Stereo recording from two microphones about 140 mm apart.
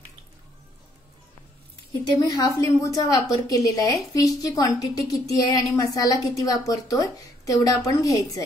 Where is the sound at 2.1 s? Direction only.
25° left (ahead or behind).